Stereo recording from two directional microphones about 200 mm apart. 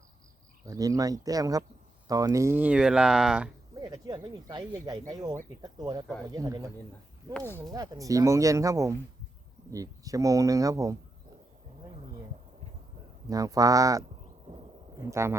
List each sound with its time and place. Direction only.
0.6 s speech: 15° right (ahead or behind)
3.8 s speech: 20° right (ahead or behind)
7.3 s speech: 10° left (ahead or behind)
7.7 s speech: 15° right (ahead or behind)
13.2 s speech: 15° right (ahead or behind)